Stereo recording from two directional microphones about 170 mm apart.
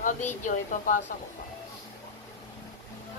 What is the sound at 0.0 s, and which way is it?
Speech, 45° left (ahead or behind).